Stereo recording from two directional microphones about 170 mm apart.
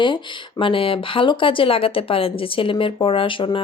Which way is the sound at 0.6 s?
30° left (ahead or behind).